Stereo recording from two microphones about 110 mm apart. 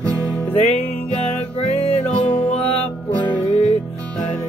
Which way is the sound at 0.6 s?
70° left (ahead or behind).